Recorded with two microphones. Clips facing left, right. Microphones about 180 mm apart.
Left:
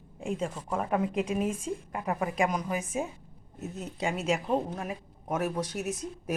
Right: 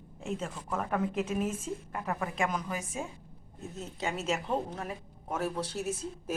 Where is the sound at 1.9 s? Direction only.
15° left (ahead or behind).